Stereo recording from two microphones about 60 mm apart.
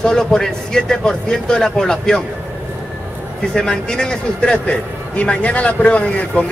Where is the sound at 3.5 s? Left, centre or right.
Centre.